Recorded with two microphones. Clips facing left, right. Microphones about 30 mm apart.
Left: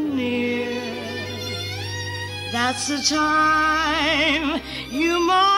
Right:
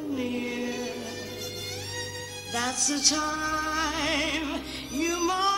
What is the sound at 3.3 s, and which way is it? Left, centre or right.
Music, left.